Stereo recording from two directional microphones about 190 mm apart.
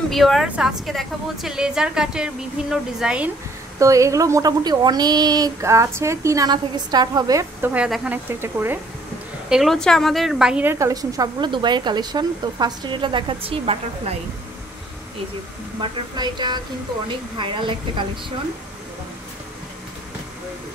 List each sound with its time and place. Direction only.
0.1 s a woman's voice: centre (ahead or behind)
3.8 s speech: 15° right (ahead or behind)
9.5 s a woman's voice: centre (ahead or behind); by 14.1 s 30° right (ahead or behind)
15.8 s a woman's voice: 25° right (ahead or behind)